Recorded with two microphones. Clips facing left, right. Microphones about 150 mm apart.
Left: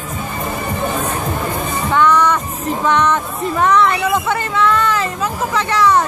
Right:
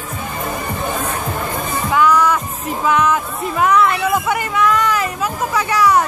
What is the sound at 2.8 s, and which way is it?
Music, 5° right (ahead or behind).